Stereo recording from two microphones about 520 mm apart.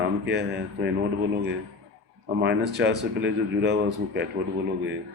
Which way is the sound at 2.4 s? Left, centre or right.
Centre.